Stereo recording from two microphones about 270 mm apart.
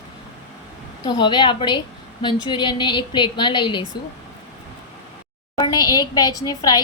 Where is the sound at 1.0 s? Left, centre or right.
Centre.